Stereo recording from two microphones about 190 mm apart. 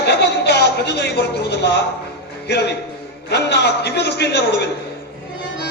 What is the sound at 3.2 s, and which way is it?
A man's voice, 60° left (ahead or behind).